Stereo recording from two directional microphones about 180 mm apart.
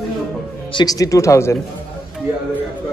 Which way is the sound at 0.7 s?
20° left (ahead or behind).